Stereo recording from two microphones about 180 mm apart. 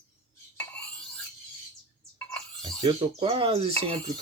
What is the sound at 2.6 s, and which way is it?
Speech, 25° right (ahead or behind).